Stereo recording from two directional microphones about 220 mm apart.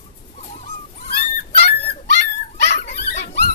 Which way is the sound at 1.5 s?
45° left (ahead or behind).